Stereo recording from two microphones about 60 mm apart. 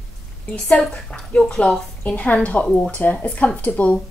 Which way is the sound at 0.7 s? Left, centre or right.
Centre.